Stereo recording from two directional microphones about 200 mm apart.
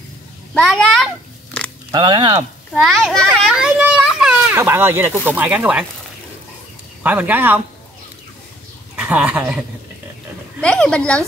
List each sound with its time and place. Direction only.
0.6 s a sound: centre (ahead or behind)
1.9 s speech: 20° right (ahead or behind)
2.7 s a child's voice: centre (ahead or behind)
7.0 s speech: 10° right (ahead or behind)
8.9 s speech: 10° right (ahead or behind)
10.6 s speech: 5° left (ahead or behind)